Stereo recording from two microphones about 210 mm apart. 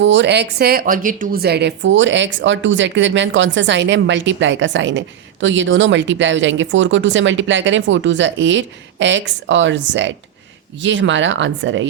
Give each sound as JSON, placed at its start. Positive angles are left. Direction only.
{"t": 0.0, "sound": "a woman's voice", "side_deg": -55}